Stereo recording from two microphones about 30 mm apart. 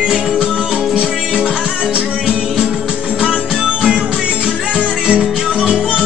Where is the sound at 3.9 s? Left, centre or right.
Right.